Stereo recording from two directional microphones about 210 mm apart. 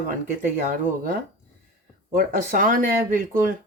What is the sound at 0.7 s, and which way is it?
Speech, 45° right (ahead or behind).